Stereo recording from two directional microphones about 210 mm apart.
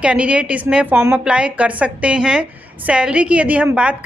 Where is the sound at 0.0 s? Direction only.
5° right (ahead or behind).